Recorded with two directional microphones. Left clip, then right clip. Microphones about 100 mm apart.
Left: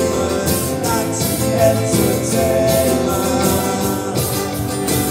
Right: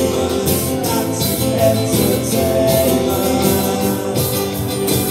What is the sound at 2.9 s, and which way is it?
Music, 15° left (ahead or behind).